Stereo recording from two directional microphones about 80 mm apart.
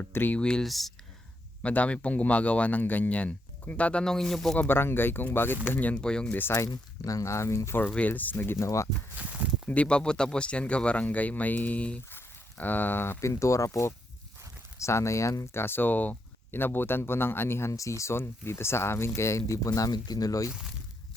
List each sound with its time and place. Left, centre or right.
0.0 s speech: left
0.3 s speech: centre
1.6 s speech: centre
4.5 s speech: left
5.9 s speech: centre
6.5 s speech: left
7.8 s speech: left
9.1 s speech: centre
9.6 s speech: centre; by 15.4 s left
15.5 s speech: left